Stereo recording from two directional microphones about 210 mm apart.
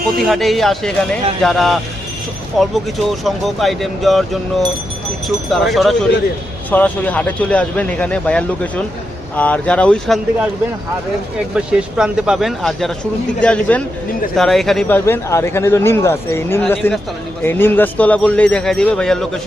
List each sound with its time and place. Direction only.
0.2 s a man's voice: centre (ahead or behind)
11.5 s a man's voice: 5° right (ahead or behind)